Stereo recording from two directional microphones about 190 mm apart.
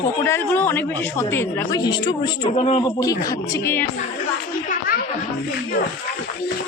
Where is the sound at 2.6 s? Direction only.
35° left (ahead or behind).